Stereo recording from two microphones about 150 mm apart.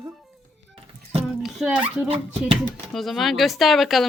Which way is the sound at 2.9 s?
Centre (ahead or behind).